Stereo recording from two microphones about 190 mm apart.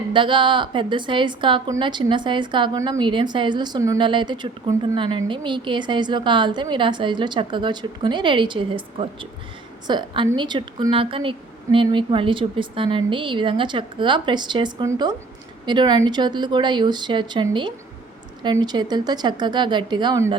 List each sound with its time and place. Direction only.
0.1 s a woman's voice: 25° right (ahead or behind)
18.4 s a woman's voice: 20° right (ahead or behind)